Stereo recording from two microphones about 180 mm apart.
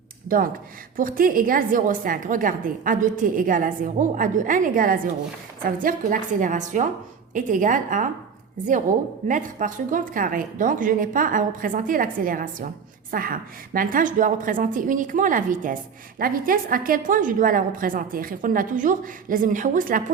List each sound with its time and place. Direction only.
0.3 s a woman's voice: 50° right (ahead or behind)
9.2 s a woman's voice: 45° right (ahead or behind)